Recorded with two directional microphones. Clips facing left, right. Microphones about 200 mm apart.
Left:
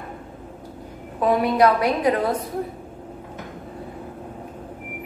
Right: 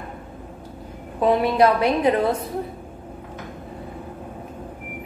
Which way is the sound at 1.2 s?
25° right (ahead or behind).